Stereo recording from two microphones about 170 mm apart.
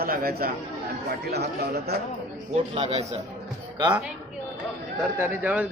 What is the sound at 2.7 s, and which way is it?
Speech, 35° right (ahead or behind).